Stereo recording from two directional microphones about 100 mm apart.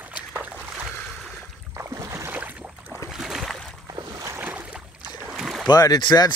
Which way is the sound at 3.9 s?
40° right (ahead or behind).